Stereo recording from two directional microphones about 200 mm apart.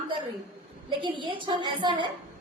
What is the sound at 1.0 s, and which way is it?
A woman's voice, 25° right (ahead or behind).